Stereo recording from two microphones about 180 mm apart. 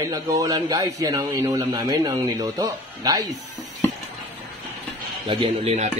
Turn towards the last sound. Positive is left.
turn(degrees=-35)  # may be behind; listen again after turning